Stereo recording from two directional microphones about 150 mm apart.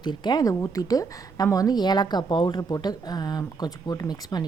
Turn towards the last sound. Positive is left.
turn(degrees=25)  # may be behind; listen again after turning